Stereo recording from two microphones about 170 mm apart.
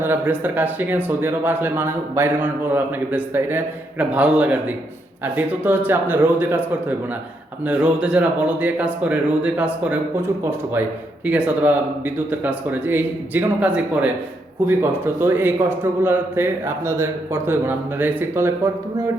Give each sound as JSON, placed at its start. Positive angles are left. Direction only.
{"t": 0.0, "sound": "a man's voice", "side_deg": -10}
{"t": 11.3, "sound": "a man's voice", "side_deg": -5}